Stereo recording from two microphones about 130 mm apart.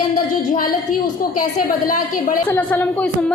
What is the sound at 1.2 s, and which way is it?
A woman's voice, 90° left.